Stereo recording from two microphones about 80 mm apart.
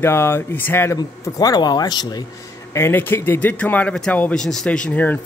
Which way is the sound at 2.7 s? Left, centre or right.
Left.